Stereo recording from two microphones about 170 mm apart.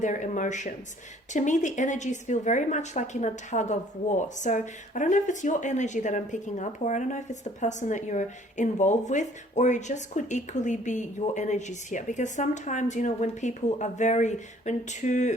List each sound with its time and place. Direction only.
0.0 s a woman's voice: 45° left (ahead or behind)